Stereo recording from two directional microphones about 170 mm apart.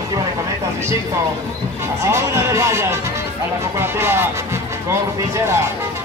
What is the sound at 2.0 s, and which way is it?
Speech, 15° right (ahead or behind).